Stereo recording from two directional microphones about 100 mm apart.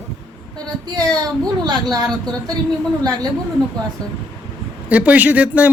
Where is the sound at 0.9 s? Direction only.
45° right (ahead or behind).